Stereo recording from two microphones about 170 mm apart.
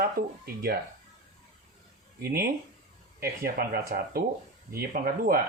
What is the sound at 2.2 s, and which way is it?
Speech, 60° right (ahead or behind).